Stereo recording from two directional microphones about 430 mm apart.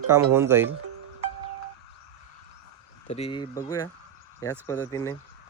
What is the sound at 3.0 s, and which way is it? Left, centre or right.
Speech, centre.